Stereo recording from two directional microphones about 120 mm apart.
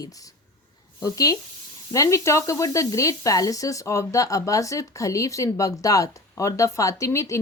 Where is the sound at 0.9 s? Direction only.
30° left (ahead or behind).